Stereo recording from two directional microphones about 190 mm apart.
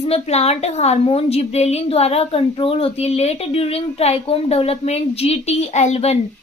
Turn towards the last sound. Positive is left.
turn(degrees=35)  # may be behind; listen again after turning